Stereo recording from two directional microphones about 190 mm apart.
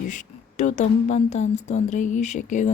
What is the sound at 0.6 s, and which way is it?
Speech, 40° left (ahead or behind).